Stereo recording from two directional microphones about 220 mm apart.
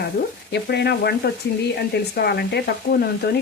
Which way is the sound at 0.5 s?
50° left (ahead or behind).